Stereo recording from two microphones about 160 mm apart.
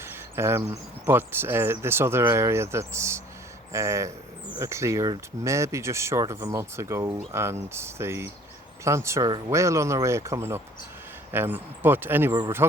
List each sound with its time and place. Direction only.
0.0 s speech: 15° right (ahead or behind)